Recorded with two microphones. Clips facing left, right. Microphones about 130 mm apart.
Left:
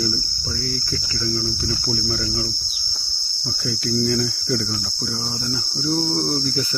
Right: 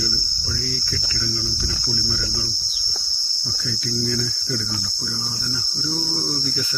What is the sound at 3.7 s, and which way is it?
Cricket, 60° left (ahead or behind).